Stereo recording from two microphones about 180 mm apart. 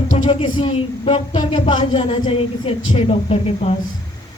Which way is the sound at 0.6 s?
30° left (ahead or behind).